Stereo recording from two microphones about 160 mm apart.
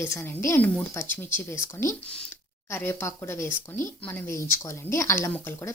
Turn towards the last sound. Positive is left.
turn(degrees=15)  # may be behind; listen again after turning